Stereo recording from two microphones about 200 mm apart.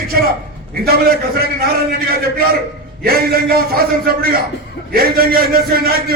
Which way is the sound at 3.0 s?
50° right (ahead or behind).